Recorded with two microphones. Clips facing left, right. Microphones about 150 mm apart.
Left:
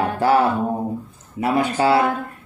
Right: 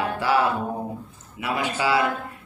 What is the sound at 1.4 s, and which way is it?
Music, 40° left (ahead or behind).